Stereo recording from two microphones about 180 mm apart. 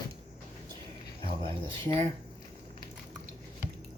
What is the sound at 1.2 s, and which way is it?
Speech, 30° right (ahead or behind).